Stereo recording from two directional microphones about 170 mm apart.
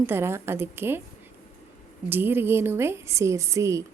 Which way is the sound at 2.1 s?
10° right (ahead or behind).